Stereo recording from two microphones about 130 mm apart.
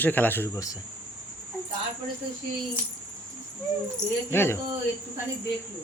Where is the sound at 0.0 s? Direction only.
15° left (ahead or behind).